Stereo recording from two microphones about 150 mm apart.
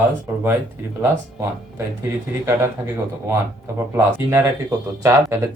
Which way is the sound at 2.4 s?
20° right (ahead or behind).